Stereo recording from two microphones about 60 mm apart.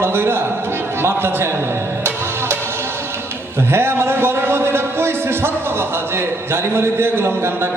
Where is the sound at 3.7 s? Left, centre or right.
Right.